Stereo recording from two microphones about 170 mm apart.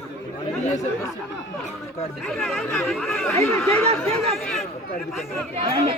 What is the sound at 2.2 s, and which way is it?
Speech, centre (ahead or behind).